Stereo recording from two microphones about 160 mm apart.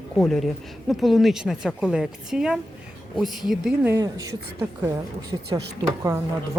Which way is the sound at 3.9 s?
20° right (ahead or behind).